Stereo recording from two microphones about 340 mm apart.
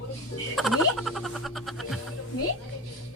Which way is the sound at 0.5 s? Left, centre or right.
Centre.